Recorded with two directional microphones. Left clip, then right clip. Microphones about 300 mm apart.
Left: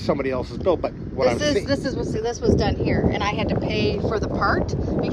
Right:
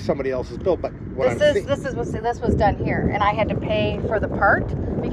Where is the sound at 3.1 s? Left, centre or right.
Left.